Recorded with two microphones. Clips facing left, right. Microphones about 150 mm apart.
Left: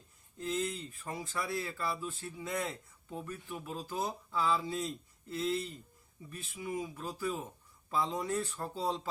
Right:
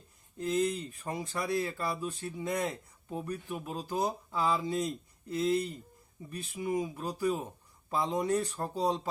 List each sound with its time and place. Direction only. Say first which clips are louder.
0.3 s speech: right 6 dB; 20° right (ahead or behind)